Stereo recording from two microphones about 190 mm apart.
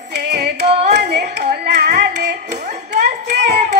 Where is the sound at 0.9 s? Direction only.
55° right (ahead or behind).